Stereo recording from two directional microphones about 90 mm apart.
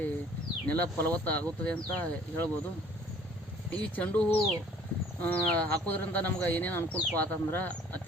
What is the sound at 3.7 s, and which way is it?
Speech, 20° left (ahead or behind).